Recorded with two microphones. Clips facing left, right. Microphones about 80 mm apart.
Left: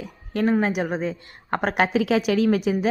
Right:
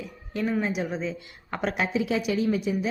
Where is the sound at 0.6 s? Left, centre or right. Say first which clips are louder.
Left 5 dB; left.